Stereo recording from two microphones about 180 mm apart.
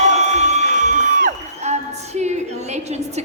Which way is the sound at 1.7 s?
40° right (ahead or behind).